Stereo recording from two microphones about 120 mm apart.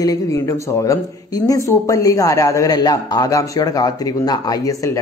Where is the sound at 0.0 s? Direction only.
30° left (ahead or behind).